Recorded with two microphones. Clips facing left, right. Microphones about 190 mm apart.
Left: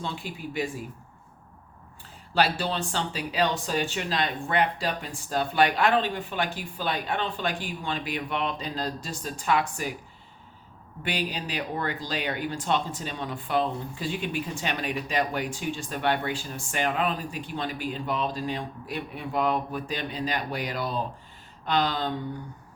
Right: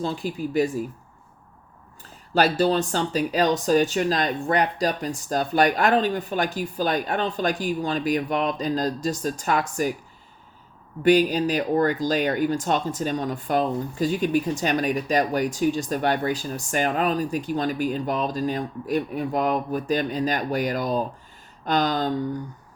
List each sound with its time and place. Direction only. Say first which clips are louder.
0.0 s speech: right 8 dB; 40° right (ahead or behind)
2.3 s speech: right 6 dB; 45° right (ahead or behind)
11.0 s speech: right 13 dB; 45° right (ahead or behind)